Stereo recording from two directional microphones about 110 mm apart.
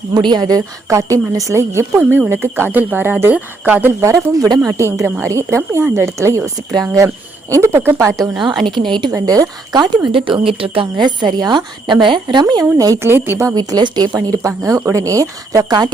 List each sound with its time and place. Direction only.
0.1 s speech: 40° right (ahead or behind)
2.0 s speech: 15° right (ahead or behind)
8.6 s speech: 45° right (ahead or behind)
9.1 s speech: 35° right (ahead or behind)
10.2 s speech: 50° right (ahead or behind); by 13.3 s 20° right (ahead or behind)
13.6 s speech: 40° right (ahead or behind)